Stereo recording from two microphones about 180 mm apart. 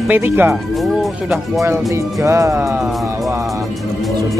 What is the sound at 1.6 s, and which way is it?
Speech, 15° right (ahead or behind).